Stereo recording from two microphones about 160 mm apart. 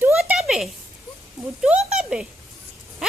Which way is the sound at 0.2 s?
Centre (ahead or behind).